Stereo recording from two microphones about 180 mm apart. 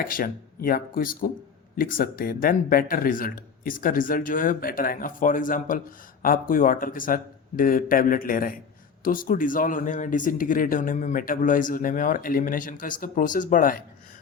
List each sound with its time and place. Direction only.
0.0 s speech: 50° left (ahead or behind)